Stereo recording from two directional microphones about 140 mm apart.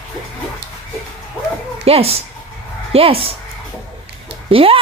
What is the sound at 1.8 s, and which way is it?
A woman's voice, 45° right (ahead or behind).